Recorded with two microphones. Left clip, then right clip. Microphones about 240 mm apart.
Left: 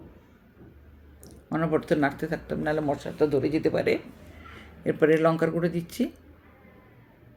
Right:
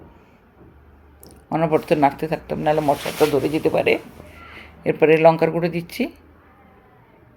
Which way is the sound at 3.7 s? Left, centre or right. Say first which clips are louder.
Right 7 dB; centre.